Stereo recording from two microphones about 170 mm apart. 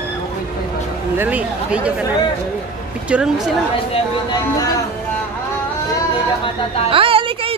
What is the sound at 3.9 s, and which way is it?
Speech, 25° left (ahead or behind).